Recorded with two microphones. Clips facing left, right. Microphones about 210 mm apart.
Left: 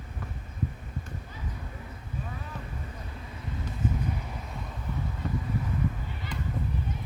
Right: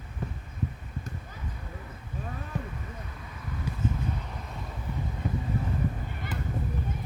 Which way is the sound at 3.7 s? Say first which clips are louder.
Right 3 dB; 10° right (ahead or behind).